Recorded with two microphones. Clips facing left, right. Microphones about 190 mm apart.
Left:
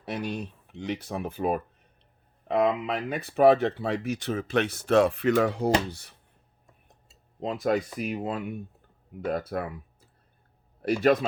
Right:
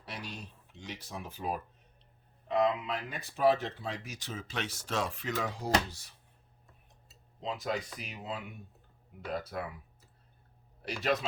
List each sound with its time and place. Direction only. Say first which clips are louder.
0.0 s speech: left 12 dB; 55° left (ahead or behind)
7.3 s speech: left 9 dB; 55° left (ahead or behind)
10.8 s speech: left 10 dB; 50° left (ahead or behind)